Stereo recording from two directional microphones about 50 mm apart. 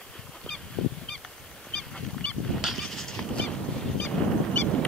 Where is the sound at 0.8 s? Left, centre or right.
Centre.